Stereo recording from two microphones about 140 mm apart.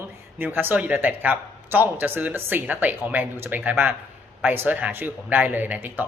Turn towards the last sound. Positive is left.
turn(degrees=-15)  # may be behind; listen again after turning